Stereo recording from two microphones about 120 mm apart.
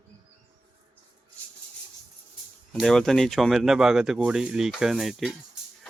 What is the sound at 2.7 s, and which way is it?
Speech, 5° left (ahead or behind).